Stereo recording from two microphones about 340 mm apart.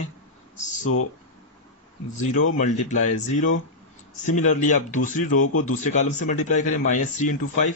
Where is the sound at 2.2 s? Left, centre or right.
Left.